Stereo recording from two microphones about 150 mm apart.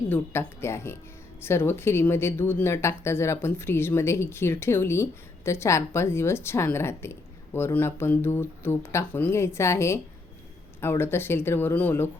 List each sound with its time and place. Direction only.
0.1 s a woman's voice: 15° left (ahead or behind)